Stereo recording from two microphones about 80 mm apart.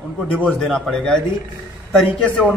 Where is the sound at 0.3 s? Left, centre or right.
Centre.